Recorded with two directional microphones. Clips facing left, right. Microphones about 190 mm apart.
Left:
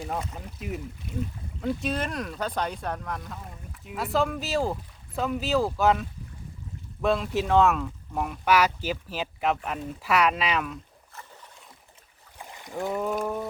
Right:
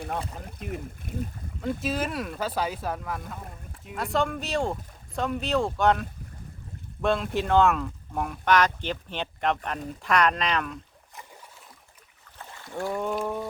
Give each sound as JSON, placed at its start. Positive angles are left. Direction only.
{"t": 1.1, "sound": "speech", "side_deg": -50}
{"t": 1.6, "sound": "speech", "side_deg": -5}
{"t": 12.4, "sound": "boat", "side_deg": 15}
{"t": 13.0, "sound": "speech", "side_deg": 0}